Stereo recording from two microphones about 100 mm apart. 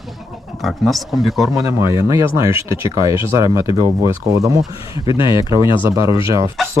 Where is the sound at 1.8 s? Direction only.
30° right (ahead or behind).